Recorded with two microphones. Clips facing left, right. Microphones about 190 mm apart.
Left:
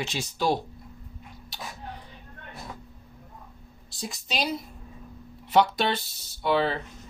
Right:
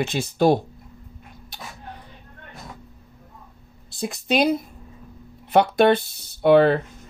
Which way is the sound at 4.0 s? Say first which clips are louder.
Right 10 dB; 55° right (ahead or behind).